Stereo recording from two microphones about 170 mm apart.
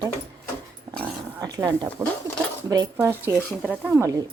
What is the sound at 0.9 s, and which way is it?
Dog, 20° right (ahead or behind).